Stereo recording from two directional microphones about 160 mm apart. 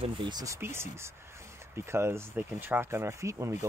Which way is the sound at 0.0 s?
30° right (ahead or behind).